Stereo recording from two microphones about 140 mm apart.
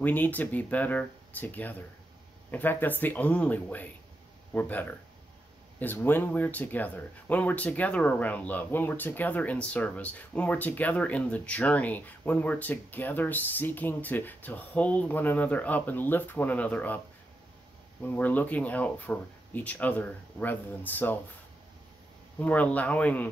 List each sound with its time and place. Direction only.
0.0 s speech: 10° left (ahead or behind)
18.0 s speech: 10° left (ahead or behind)
22.4 s speech: 10° left (ahead or behind)